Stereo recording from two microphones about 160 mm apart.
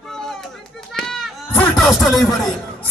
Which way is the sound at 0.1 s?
5° left (ahead or behind).